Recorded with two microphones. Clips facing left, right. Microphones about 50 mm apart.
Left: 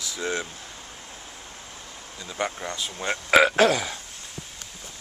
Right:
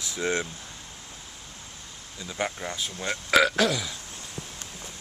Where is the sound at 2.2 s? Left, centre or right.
Centre.